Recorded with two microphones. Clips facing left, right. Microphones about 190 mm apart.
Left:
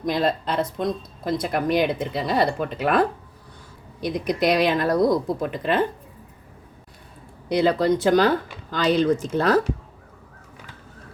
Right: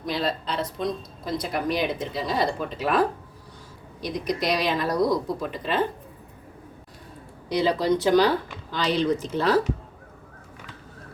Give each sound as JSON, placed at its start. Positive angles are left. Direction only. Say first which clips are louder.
{"t": 0.0, "sound": "speech", "louder": "left 5 dB", "side_deg": 50}
{"t": 4.0, "sound": "speech", "louder": "left 4 dB", "side_deg": 55}
{"t": 7.5, "sound": "speech", "louder": "left 3 dB", "side_deg": 55}